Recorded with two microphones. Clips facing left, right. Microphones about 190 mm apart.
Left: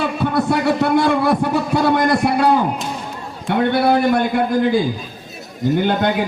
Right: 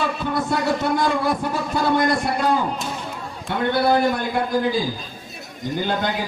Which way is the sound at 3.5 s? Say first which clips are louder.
Left 4 dB; 60° left (ahead or behind).